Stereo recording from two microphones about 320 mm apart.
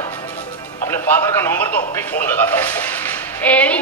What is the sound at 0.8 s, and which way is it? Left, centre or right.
Speech, centre.